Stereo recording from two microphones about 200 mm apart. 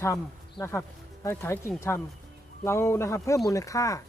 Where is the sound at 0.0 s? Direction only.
15° left (ahead or behind).